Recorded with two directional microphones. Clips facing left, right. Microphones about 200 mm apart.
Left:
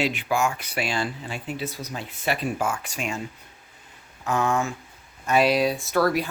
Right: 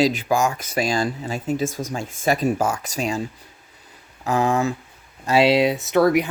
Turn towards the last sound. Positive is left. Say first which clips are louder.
# right 5 dB
turn(degrees=-20)  # may be behind; listen again after turning